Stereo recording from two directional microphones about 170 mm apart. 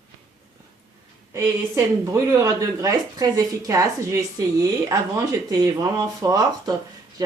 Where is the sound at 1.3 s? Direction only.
15° right (ahead or behind).